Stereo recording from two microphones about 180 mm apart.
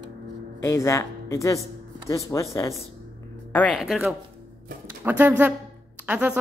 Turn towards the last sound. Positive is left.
turn(degrees=-10)  # may be behind; listen again after turning